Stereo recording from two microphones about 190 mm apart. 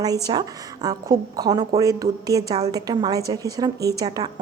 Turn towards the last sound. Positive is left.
turn(degrees=-20)  # may be behind; listen again after turning